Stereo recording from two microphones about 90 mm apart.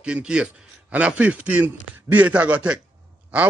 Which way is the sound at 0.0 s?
10° right (ahead or behind).